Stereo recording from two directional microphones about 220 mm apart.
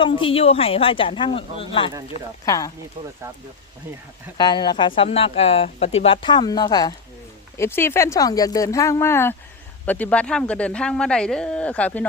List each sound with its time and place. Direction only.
0.0 s speech: 25° left (ahead or behind)
4.4 s speech: 20° left (ahead or behind)